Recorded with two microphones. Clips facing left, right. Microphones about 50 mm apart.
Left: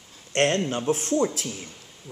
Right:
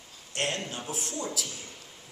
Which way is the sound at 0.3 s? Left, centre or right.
Left.